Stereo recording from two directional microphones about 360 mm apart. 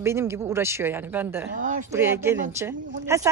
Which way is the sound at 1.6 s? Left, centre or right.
Right.